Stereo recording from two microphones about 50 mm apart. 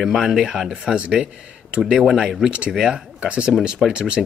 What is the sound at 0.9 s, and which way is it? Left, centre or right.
Speech, right.